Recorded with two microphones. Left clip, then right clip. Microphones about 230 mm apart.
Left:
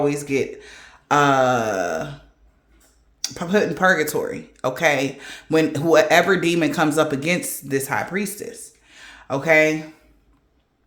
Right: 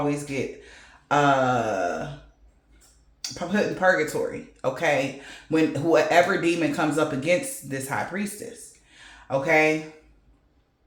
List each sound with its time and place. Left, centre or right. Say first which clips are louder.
0.0 s speech: left 6 dB; left
3.2 s speech: left 6 dB; left